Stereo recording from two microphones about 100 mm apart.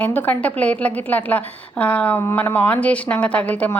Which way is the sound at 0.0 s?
15° left (ahead or behind).